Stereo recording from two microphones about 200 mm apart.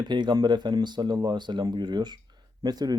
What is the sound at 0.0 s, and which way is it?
Speech, 20° right (ahead or behind).